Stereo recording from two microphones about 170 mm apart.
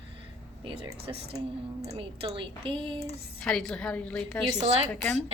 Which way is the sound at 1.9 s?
30° right (ahead or behind).